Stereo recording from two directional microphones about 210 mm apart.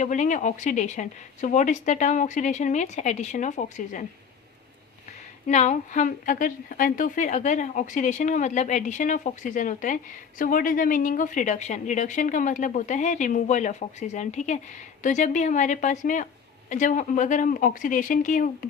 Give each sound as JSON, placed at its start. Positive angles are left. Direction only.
{"t": 0.0, "sound": "a woman's voice", "side_deg": 35}
{"t": 5.5, "sound": "a woman's voice", "side_deg": 35}